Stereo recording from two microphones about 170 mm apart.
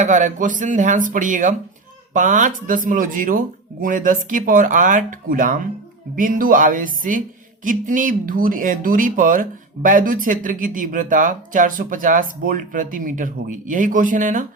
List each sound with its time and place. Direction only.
0.0 s speech: 45° right (ahead or behind)